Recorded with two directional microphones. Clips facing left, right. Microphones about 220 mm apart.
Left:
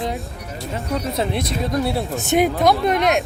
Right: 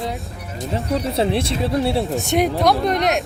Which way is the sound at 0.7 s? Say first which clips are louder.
Right 3 dB; 30° right (ahead or behind).